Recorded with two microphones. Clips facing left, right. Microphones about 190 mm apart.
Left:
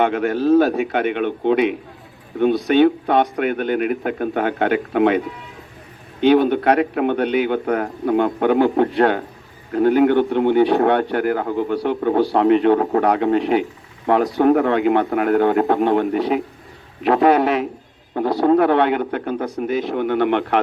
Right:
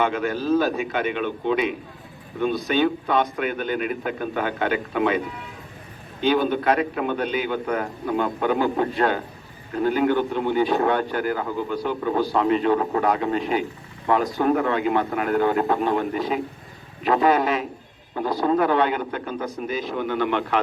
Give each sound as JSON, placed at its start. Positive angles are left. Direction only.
{"t": 0.0, "sound": "a man's voice", "side_deg": 65}